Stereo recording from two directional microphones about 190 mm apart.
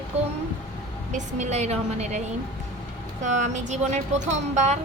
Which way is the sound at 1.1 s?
40° right (ahead or behind).